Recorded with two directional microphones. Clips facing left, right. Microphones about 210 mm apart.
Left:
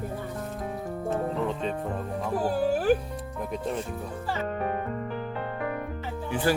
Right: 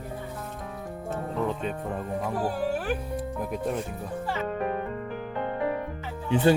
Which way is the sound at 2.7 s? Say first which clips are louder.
Left 6 dB; 35° left (ahead or behind).